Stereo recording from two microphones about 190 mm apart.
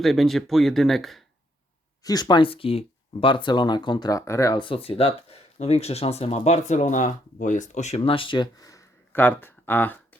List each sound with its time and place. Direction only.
0.0 s speech: centre (ahead or behind)
2.0 s speech: 20° left (ahead or behind)